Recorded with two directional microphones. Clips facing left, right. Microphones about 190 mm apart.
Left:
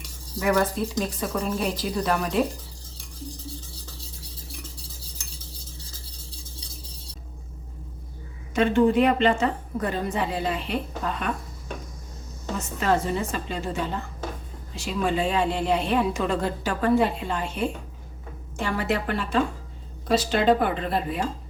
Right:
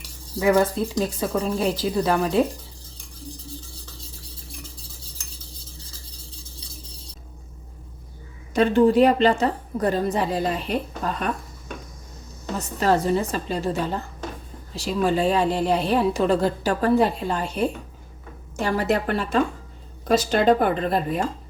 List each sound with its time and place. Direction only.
0.3 s speech: 25° right (ahead or behind)
8.5 s a woman's voice: 35° right (ahead or behind)
12.5 s a woman's voice: 35° right (ahead or behind)